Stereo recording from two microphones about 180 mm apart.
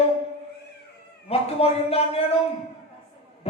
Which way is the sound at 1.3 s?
35° left (ahead or behind).